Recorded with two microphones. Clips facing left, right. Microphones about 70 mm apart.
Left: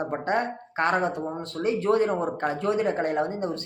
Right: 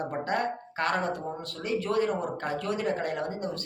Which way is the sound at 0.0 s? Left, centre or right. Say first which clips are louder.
Left 3 dB; left.